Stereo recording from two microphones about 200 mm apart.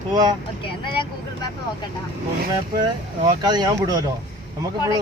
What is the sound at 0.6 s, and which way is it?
Speech, 25° left (ahead or behind).